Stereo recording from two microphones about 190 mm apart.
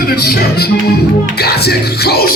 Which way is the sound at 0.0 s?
55° left (ahead or behind).